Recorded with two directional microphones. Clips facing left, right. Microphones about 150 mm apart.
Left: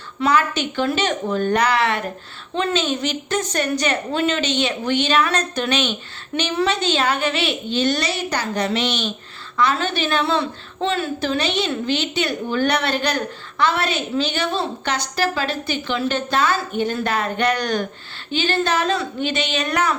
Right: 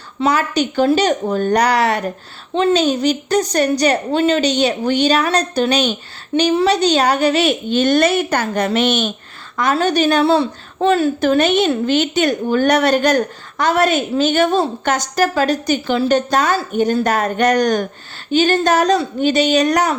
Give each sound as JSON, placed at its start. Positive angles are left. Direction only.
{"t": 0.2, "sound": "a woman's voice", "side_deg": -40}